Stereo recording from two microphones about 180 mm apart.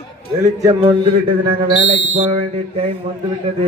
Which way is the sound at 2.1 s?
40° right (ahead or behind).